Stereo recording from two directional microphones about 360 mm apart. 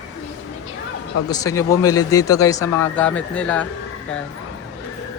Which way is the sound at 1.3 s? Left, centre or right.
Centre.